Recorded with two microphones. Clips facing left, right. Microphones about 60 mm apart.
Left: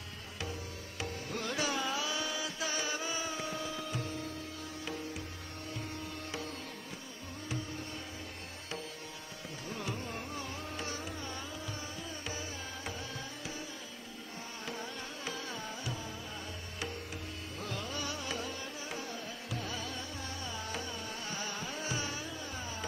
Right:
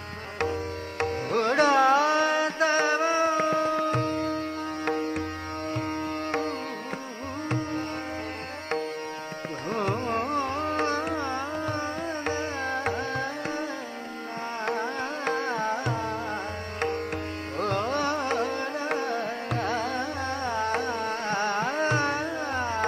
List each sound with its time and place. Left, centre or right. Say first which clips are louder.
0.4 s music: right 14 dB; right
9.7 s carnatic music: right 13 dB; right
12.3 s music: right 15 dB; right
14.6 s carnatic music: right 13 dB; right
17.6 s music: right 14 dB; right